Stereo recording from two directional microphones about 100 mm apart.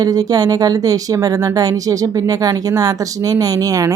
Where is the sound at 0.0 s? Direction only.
40° right (ahead or behind).